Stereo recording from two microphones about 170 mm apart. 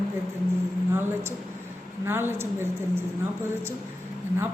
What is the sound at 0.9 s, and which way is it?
A woman's voice, 15° right (ahead or behind).